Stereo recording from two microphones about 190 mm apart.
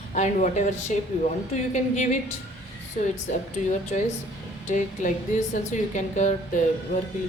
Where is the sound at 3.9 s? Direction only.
35° left (ahead or behind).